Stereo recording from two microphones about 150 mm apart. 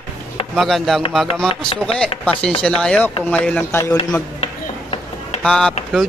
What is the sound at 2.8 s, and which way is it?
Speech, 5° left (ahead or behind).